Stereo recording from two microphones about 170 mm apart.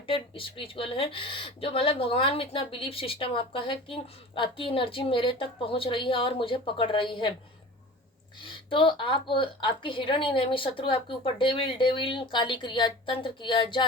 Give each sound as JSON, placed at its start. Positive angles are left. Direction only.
{"t": 0.1, "sound": "speech", "side_deg": 30}
{"t": 8.4, "sound": "a woman's voice", "side_deg": 30}